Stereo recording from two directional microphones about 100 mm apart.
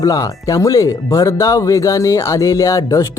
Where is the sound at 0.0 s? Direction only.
35° left (ahead or behind).